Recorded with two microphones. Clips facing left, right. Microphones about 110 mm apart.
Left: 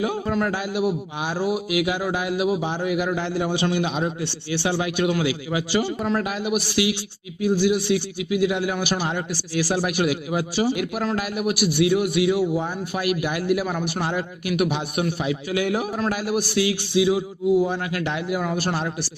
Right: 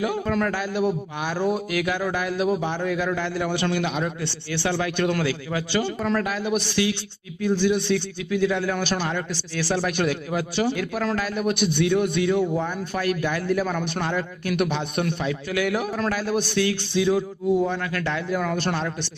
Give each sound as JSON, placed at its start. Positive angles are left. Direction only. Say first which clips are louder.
{"t": 0.0, "sound": "a man's voice", "louder": "even", "side_deg": 20}